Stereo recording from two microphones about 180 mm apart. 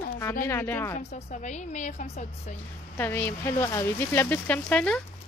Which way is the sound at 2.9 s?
10° left (ahead or behind).